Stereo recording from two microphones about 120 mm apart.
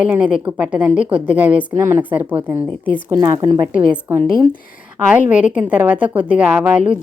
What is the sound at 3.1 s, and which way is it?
Speech, 30° right (ahead or behind).